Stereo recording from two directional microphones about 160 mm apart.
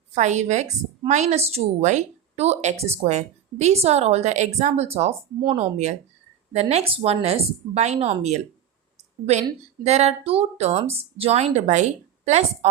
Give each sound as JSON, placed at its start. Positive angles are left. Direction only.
{"t": 0.1, "sound": "a woman's voice", "side_deg": -45}
{"t": 9.8, "sound": "a woman's voice", "side_deg": -40}